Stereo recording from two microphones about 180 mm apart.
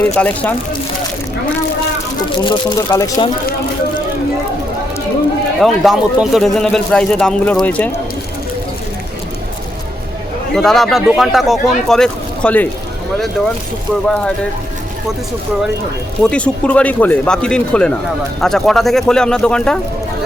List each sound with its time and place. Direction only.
0.2 s speech: 5° left (ahead or behind)
2.4 s speech: 25° left (ahead or behind)
5.5 s speech: centre (ahead or behind)
10.5 s speech: centre (ahead or behind)
16.2 s speech: 5° left (ahead or behind)